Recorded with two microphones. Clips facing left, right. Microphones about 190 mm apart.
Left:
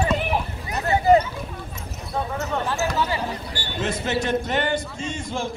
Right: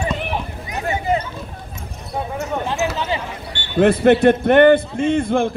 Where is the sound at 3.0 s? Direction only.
20° right (ahead or behind).